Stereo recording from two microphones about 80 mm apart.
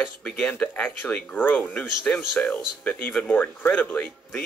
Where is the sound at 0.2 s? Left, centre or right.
Centre.